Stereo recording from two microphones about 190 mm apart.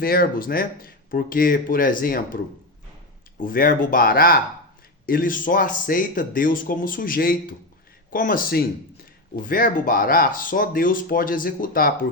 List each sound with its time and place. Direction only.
0.0 s speech: 50° left (ahead or behind)